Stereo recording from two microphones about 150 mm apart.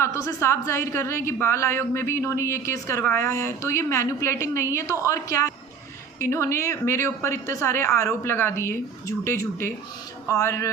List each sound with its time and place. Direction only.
0.0 s a woman's voice: 20° left (ahead or behind)